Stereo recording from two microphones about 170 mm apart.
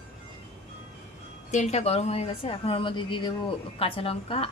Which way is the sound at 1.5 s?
40° left (ahead or behind).